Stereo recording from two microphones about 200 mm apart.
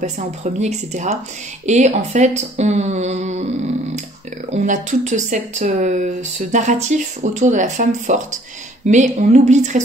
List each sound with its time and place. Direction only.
0.0 s speech: 35° right (ahead or behind)